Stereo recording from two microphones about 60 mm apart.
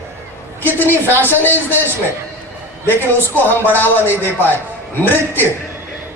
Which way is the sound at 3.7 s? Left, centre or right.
Left.